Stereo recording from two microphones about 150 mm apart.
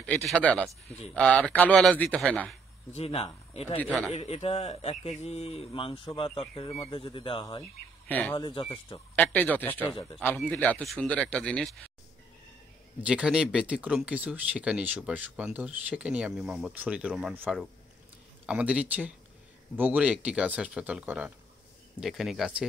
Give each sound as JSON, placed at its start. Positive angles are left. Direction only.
{"t": 0.0, "sound": "a man's voice", "side_deg": 5}
{"t": 2.9, "sound": "speech", "side_deg": 45}
{"t": 3.7, "sound": "a man's voice", "side_deg": 10}
{"t": 4.1, "sound": "speech", "side_deg": 45}
{"t": 8.1, "sound": "a man's voice", "side_deg": 10}
{"t": 8.4, "sound": "speech", "side_deg": 35}
{"t": 9.1, "sound": "a man's voice", "side_deg": 10}
{"t": 13.0, "sound": "speech", "side_deg": -5}